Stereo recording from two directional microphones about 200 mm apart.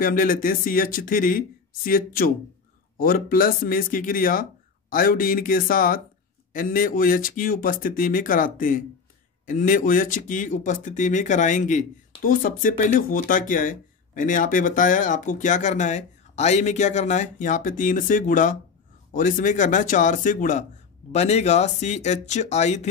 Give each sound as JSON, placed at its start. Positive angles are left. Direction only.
{"t": 0.0, "sound": "speech", "side_deg": 45}